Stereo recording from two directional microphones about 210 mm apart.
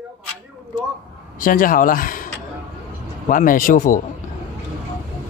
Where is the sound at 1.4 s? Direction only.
40° left (ahead or behind).